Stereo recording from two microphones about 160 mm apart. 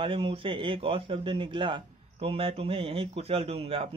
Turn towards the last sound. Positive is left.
turn(degrees=-40)  # may be behind; listen again after turning